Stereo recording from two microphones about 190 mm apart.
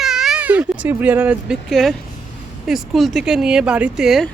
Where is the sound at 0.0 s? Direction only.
Centre (ahead or behind).